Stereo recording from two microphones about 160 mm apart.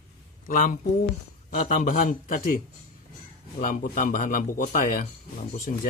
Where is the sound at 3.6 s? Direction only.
60° left (ahead or behind).